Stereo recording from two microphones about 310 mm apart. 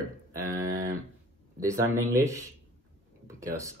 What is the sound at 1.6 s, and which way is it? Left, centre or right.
Speech, centre.